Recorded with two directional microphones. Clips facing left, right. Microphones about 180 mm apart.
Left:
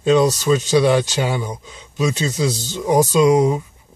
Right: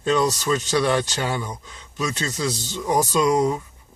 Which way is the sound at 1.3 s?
20° left (ahead or behind).